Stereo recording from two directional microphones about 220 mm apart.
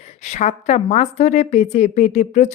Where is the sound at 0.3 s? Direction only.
30° left (ahead or behind).